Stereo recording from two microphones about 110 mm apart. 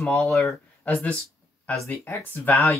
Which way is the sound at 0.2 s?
Centre (ahead or behind).